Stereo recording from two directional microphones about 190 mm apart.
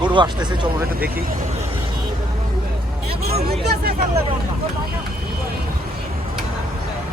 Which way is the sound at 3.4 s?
55° right (ahead or behind).